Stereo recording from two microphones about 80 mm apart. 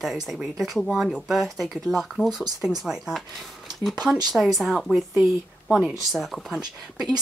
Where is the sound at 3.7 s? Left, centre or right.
Right.